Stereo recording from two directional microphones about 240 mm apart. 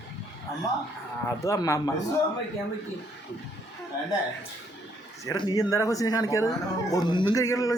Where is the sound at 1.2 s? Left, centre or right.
Centre.